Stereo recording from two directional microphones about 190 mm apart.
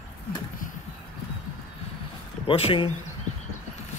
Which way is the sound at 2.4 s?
30° left (ahead or behind).